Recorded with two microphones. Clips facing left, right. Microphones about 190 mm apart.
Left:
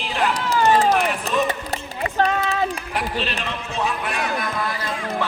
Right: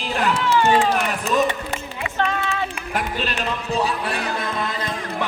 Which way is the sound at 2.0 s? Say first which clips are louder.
Left 4 dB; 40° left (ahead or behind).